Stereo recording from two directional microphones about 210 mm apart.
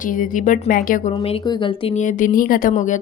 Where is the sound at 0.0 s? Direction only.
40° left (ahead or behind).